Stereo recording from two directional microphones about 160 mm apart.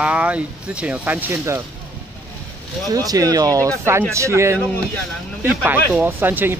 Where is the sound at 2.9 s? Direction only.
20° right (ahead or behind).